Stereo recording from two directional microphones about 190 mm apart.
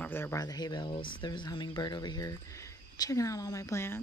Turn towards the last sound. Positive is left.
turn(degrees=15)  # may be behind; listen again after turning